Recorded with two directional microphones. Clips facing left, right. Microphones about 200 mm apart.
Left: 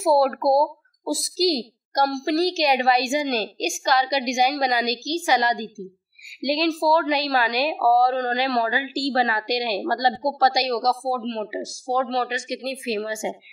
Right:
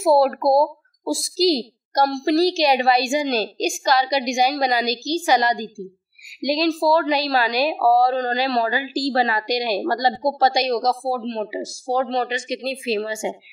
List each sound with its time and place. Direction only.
0.0 s a woman's voice: 20° right (ahead or behind); by 10.1 s 40° right (ahead or behind)
10.2 s speech: 25° right (ahead or behind)